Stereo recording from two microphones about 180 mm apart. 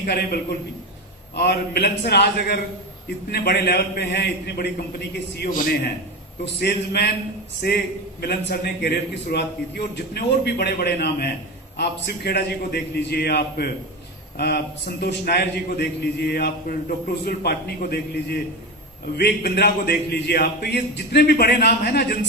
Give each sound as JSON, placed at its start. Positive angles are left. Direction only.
{"t": 0.0, "sound": "a man's voice", "side_deg": 60}
{"t": 1.4, "sound": "a man's voice", "side_deg": 60}